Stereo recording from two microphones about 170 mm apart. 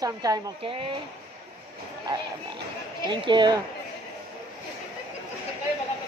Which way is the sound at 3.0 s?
30° right (ahead or behind).